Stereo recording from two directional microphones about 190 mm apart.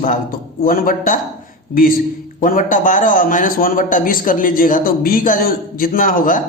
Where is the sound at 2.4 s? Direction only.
45° left (ahead or behind).